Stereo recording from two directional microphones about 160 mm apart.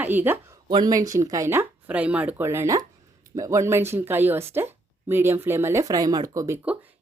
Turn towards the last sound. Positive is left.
turn(degrees=-10)  # may be behind; listen again after turning